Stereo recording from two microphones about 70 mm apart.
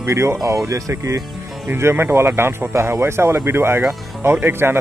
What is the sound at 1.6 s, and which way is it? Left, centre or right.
Speech, right.